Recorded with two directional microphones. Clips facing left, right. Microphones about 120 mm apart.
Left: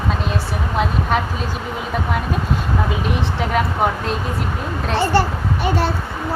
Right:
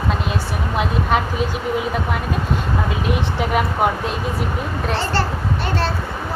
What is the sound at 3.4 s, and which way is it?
Speech, 5° right (ahead or behind).